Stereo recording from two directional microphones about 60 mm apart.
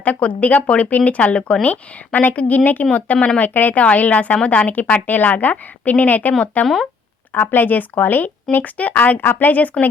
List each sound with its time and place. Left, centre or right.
0.0 s a woman's voice: left
7.3 s a woman's voice: left